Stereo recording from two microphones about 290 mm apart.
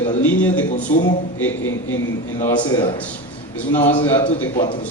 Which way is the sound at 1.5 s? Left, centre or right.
Left.